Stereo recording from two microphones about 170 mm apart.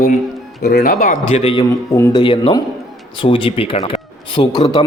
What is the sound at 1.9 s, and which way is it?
Speech, 15° left (ahead or behind).